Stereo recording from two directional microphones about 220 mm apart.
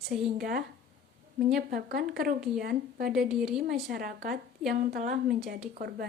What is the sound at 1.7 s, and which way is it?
A woman's voice, 45° right (ahead or behind).